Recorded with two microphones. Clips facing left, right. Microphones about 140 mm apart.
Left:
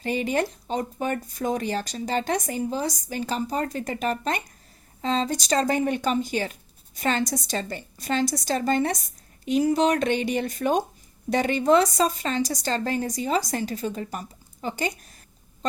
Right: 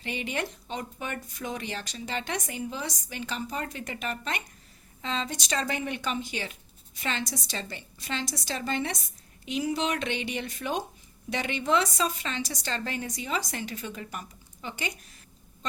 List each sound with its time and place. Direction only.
0.0 s speech: 40° left (ahead or behind)